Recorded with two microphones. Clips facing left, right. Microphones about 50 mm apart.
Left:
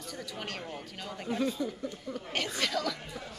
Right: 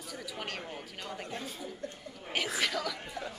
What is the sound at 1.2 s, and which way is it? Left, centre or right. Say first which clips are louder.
Speech: left 9 dB; left.